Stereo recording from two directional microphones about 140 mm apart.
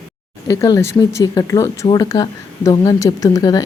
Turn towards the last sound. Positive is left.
turn(degrees=25)  # may be behind; listen again after turning